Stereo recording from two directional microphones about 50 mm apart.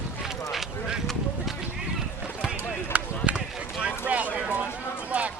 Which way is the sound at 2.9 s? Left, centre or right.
Right.